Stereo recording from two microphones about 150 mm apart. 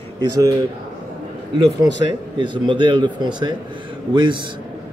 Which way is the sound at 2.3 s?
35° right (ahead or behind).